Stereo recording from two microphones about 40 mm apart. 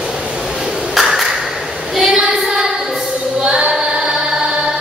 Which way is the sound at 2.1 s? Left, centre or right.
Centre.